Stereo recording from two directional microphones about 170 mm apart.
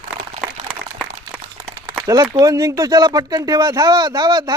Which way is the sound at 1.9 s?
25° right (ahead or behind).